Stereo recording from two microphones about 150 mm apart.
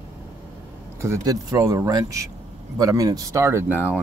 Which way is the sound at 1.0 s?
20° right (ahead or behind).